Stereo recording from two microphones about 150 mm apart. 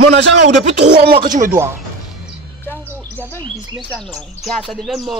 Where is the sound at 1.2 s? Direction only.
60° right (ahead or behind).